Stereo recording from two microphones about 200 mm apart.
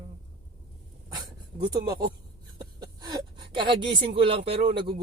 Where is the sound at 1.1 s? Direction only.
20° right (ahead or behind).